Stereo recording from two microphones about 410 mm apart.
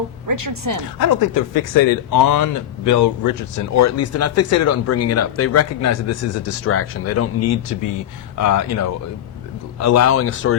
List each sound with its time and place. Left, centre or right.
0.3 s a woman's voice: right
0.9 s speech: left